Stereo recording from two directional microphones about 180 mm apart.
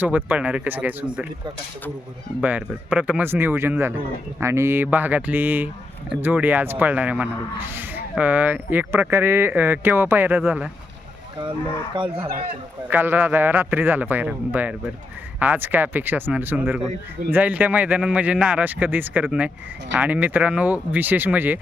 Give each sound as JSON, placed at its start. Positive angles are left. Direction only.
{"t": 0.3, "sound": "speech", "side_deg": -10}
{"t": 2.4, "sound": "speech", "side_deg": -10}
{"t": 11.9, "sound": "speech", "side_deg": -25}
{"t": 12.9, "sound": "speech", "side_deg": -10}